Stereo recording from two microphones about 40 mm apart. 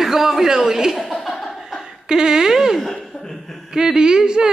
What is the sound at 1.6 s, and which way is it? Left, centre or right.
Chuckle, centre.